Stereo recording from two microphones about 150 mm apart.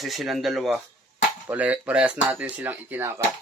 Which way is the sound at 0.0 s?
Centre (ahead or behind).